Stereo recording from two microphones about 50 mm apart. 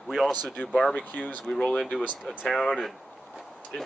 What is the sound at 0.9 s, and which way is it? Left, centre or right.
Speech, left.